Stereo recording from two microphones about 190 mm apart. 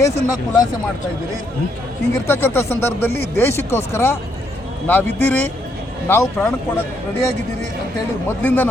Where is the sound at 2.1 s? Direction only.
15° left (ahead or behind).